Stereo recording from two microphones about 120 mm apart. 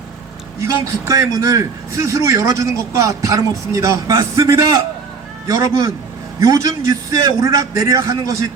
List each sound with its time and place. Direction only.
0.6 s a man's voice: 25° right (ahead or behind)